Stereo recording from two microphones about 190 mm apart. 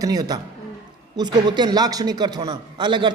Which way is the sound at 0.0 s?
20° right (ahead or behind).